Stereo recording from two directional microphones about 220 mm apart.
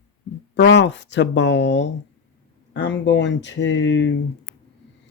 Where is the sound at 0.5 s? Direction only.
55° left (ahead or behind).